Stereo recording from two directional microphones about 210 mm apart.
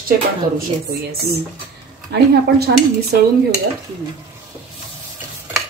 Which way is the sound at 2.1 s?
50° right (ahead or behind).